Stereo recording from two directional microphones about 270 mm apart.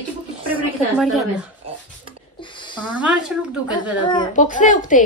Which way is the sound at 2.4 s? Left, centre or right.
Centre.